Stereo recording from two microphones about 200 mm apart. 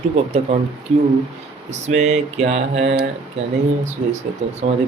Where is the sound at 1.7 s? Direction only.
35° right (ahead or behind).